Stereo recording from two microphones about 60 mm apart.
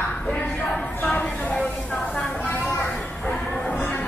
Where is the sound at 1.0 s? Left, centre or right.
Left.